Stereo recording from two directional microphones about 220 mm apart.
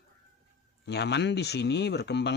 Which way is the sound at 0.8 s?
50° left (ahead or behind).